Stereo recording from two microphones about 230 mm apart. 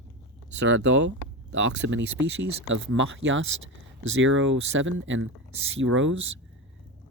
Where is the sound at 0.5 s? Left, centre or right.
Right.